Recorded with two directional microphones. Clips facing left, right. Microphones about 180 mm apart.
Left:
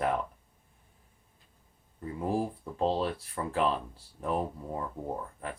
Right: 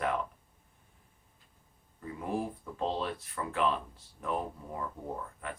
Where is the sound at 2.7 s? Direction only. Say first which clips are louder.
Left 5 dB; 35° left (ahead or behind).